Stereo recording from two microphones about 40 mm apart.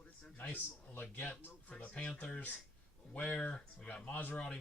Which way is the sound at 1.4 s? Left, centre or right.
Left.